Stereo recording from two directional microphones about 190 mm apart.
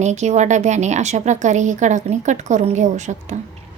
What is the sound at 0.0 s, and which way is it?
A woman's voice, 35° right (ahead or behind).